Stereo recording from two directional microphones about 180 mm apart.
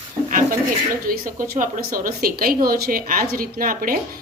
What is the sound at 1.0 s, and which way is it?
A woman's voice, 50° right (ahead or behind).